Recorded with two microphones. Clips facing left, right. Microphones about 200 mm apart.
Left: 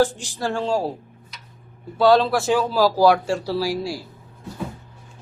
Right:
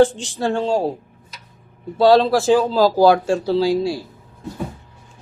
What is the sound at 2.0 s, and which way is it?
A man's voice, 25° right (ahead or behind).